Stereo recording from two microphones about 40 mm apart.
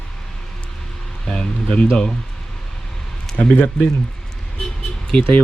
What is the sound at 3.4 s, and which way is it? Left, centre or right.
Speech, left.